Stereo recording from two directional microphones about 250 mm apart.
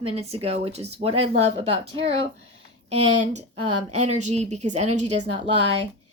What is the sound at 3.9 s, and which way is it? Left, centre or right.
Speech, right.